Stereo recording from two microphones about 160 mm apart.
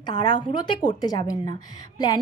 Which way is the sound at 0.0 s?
30° left (ahead or behind).